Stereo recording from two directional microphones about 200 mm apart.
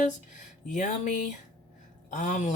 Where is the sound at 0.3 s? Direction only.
35° left (ahead or behind).